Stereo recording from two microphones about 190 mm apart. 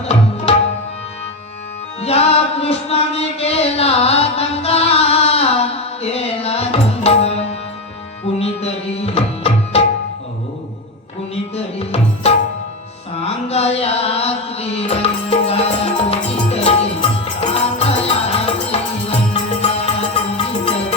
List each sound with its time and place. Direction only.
0.0 s tabla: 35° left (ahead or behind)
2.0 s chant: 35° left (ahead or behind)
8.4 s tabla: 35° left (ahead or behind)
11.5 s tabla: 35° left (ahead or behind)
13.1 s music: 30° left (ahead or behind)